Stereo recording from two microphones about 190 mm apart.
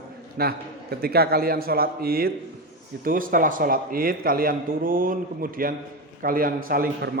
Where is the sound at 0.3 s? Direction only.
55° right (ahead or behind).